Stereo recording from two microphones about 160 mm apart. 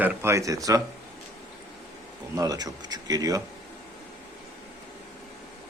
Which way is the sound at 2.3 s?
20° right (ahead or behind).